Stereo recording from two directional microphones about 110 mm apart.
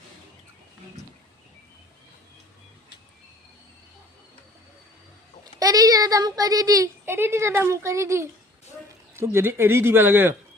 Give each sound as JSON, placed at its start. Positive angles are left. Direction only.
{"t": 5.5, "sound": "a sound", "side_deg": -35}
{"t": 7.0, "sound": "speech", "side_deg": -20}
{"t": 9.3, "sound": "speech", "side_deg": -20}